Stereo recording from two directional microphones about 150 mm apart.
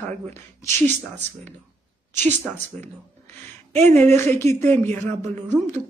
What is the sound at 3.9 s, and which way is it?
Speech, 15° left (ahead or behind).